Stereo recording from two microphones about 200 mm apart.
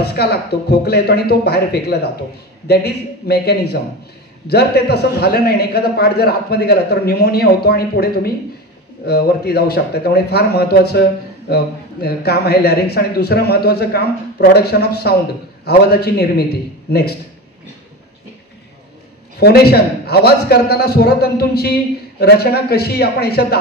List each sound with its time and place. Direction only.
0.0 s a man's voice: 55° left (ahead or behind)
19.4 s a man's voice: 55° left (ahead or behind)